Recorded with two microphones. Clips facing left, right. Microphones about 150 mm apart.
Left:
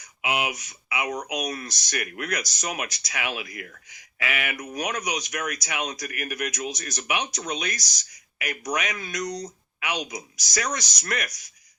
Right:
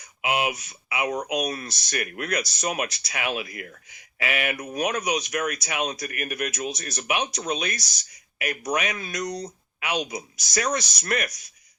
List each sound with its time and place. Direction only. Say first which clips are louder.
0.0 s speech: right 2 dB; 30° right (ahead or behind)